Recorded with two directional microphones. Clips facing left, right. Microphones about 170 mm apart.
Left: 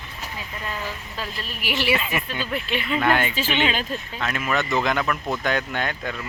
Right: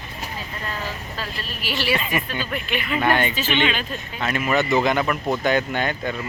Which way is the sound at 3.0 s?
Centre (ahead or behind).